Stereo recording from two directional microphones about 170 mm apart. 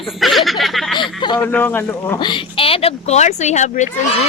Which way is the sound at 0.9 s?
25° left (ahead or behind).